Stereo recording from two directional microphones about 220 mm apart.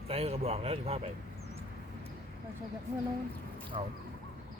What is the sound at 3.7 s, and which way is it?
Speech, 25° right (ahead or behind).